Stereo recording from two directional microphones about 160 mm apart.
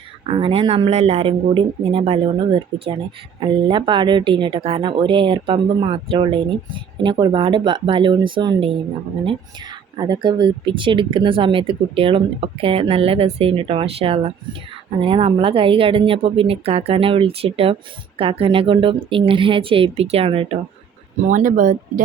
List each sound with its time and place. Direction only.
0.3 s speech: 40° right (ahead or behind)
21.2 s speech: 50° right (ahead or behind)